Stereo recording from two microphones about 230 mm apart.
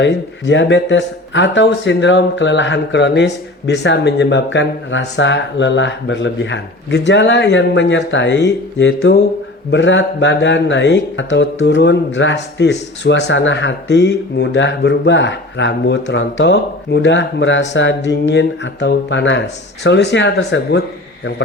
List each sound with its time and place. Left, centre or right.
0.0 s speech: left